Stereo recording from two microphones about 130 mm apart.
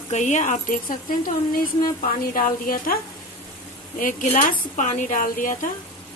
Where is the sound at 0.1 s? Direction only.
65° left (ahead or behind); by 2.8 s 90° left.